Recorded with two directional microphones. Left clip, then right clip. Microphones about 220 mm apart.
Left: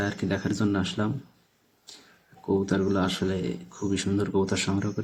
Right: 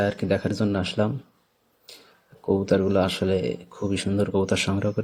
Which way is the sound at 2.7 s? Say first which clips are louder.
Right 5 dB; 30° right (ahead or behind).